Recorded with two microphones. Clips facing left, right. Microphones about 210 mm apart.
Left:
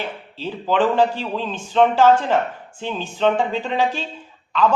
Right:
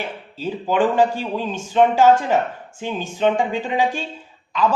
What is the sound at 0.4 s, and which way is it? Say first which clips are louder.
Speech: even; 10° right (ahead or behind).